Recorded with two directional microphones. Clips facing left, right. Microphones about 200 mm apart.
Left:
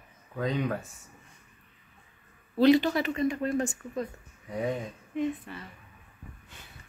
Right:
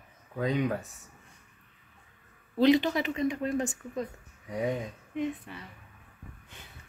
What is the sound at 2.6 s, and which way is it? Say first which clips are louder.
Speech: left 2 dB; 20° right (ahead or behind).